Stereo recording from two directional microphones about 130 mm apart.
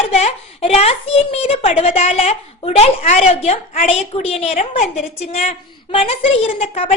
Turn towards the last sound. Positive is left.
turn(degrees=55)  # may be behind; listen again after turning